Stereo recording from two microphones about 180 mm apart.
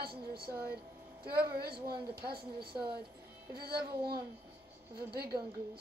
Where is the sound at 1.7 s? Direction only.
20° right (ahead or behind).